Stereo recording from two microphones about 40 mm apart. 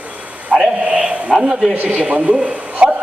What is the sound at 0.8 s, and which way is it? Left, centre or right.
Speech, right.